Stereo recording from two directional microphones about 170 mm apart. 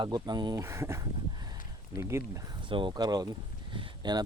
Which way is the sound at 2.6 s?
30° right (ahead or behind).